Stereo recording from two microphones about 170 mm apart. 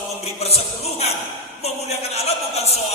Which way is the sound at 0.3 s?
40° left (ahead or behind).